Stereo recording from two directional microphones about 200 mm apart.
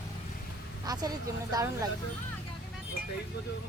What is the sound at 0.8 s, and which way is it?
A woman's voice, 20° right (ahead or behind).